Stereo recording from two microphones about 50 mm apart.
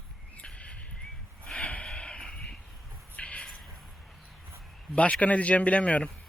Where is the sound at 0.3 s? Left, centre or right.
Left.